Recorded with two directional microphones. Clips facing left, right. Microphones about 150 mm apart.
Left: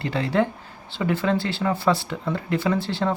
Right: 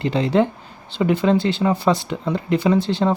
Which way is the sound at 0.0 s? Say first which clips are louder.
Right 5 dB; 20° right (ahead or behind).